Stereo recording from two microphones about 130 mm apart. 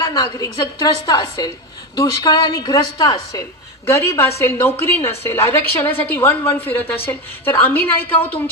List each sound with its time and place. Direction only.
0.0 s a woman's voice: 30° left (ahead or behind); by 8.4 s 15° left (ahead or behind)